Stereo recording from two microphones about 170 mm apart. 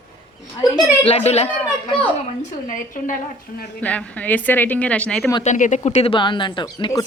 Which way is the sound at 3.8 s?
10° left (ahead or behind).